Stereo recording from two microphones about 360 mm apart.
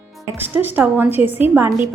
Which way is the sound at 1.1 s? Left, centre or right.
Centre.